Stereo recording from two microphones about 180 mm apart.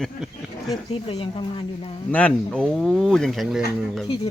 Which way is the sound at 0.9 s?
30° left (ahead or behind).